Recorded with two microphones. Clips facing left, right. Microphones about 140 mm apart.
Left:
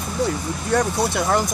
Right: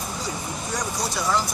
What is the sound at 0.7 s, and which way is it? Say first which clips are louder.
Speech: left 9 dB; 55° left (ahead or behind).